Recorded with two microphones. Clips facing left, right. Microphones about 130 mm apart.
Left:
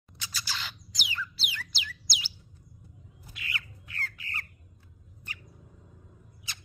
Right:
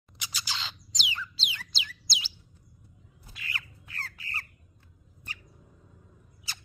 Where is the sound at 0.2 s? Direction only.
15° right (ahead or behind).